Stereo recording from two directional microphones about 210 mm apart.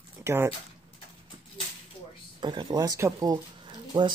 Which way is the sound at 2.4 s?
20° right (ahead or behind).